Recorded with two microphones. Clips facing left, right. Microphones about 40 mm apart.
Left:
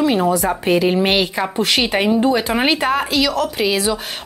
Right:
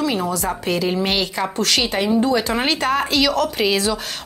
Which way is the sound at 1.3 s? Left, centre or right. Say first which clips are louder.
Left 2 dB; centre.